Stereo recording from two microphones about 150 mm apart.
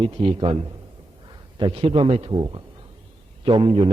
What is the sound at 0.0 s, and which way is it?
A man's voice, 35° right (ahead or behind).